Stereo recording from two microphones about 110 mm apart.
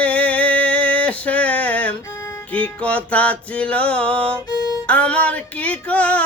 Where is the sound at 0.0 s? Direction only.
10° left (ahead or behind).